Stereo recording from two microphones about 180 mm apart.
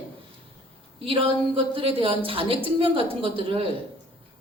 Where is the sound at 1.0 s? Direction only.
30° right (ahead or behind).